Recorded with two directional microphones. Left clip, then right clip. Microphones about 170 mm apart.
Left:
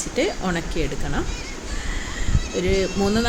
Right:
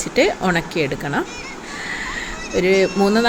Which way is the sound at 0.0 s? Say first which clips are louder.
Right 6 dB; 20° right (ahead or behind).